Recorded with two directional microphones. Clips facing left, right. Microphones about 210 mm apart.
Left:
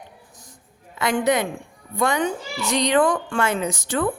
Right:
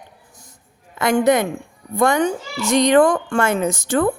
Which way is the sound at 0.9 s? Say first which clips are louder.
Right 5 dB; 45° right (ahead or behind).